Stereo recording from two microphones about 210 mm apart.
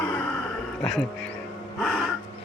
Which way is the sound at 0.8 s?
Centre (ahead or behind).